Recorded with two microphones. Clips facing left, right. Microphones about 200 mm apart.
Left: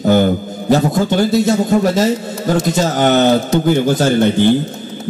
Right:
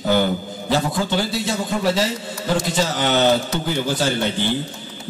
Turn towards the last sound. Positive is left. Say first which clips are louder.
# left 10 dB
turn(degrees=50)  # may be behind; listen again after turning